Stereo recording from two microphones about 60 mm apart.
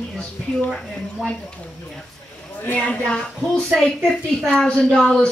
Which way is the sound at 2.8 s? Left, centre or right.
Centre.